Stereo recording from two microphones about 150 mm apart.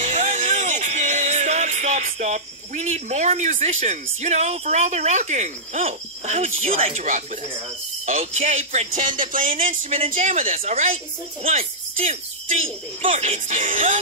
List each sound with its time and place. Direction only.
0.0 s speech: 50° right (ahead or behind)
10.6 s speech: 45° right (ahead or behind)